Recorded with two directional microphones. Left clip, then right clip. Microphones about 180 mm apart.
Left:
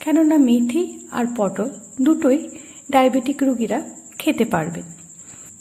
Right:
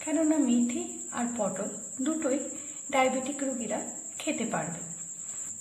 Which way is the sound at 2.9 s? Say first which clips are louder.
Left 10 dB; 35° left (ahead or behind).